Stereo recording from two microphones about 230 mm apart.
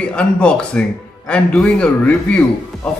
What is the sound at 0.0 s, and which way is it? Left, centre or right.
Speech, centre.